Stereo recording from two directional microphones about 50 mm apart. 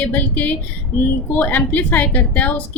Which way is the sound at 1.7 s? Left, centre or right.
Left.